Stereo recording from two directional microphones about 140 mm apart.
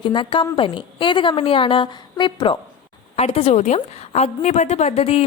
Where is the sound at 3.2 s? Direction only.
45° left (ahead or behind).